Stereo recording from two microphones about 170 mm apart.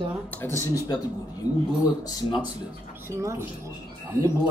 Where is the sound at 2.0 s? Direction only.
25° left (ahead or behind).